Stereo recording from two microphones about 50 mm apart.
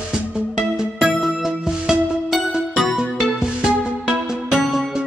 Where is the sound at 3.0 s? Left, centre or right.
Centre.